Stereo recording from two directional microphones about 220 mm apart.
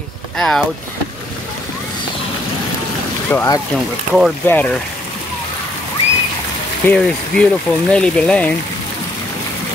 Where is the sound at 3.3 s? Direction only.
15° left (ahead or behind).